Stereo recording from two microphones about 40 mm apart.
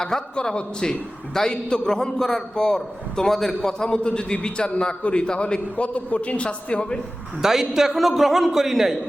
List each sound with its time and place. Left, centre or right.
0.0 s a man's voice: centre
5.7 s a man's voice: left
7.4 s a man's voice: centre